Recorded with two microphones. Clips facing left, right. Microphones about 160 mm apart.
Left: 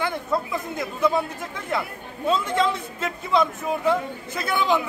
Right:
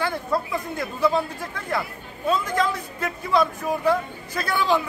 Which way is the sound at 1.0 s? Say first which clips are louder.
Even; 20° left (ahead or behind).